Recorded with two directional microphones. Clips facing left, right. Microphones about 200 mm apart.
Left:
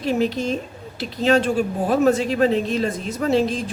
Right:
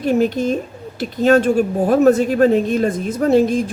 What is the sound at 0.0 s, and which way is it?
Speech, 50° right (ahead or behind).